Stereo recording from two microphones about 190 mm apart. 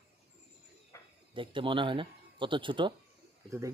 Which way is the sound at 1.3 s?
25° right (ahead or behind).